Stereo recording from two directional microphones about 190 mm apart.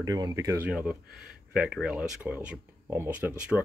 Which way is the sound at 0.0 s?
20° right (ahead or behind).